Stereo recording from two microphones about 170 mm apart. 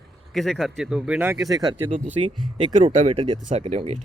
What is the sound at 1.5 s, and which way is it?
Speech, 20° right (ahead or behind).